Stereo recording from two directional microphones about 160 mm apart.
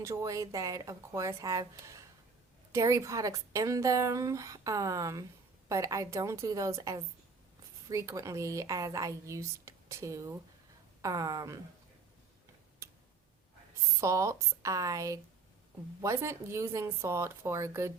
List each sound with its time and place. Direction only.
0.0 s a woman's voice: 20° right (ahead or behind)
12.8 s tick-tock: 15° right (ahead or behind)
14.0 s a woman's voice: 20° right (ahead or behind)